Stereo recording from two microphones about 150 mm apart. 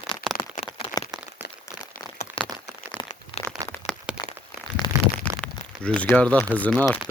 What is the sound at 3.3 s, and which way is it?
Crumpling, 40° left (ahead or behind).